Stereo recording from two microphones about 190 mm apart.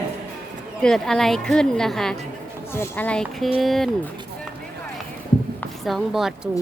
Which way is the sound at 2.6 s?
15° left (ahead or behind).